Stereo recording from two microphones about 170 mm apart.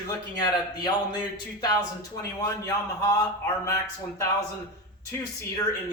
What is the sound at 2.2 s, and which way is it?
A man's voice, 20° left (ahead or behind).